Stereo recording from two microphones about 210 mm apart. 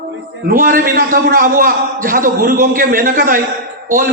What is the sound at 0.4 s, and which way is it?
A man's voice, 45° right (ahead or behind).